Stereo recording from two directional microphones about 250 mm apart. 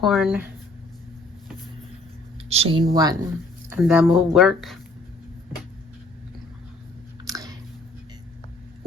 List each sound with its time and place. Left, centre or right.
0.0 s speech: centre
2.5 s speech: right
3.7 s speech: centre
7.3 s biting: centre